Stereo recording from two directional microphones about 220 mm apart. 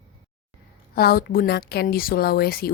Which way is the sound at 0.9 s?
45° left (ahead or behind).